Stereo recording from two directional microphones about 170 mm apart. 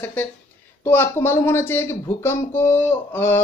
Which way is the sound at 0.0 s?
10° left (ahead or behind).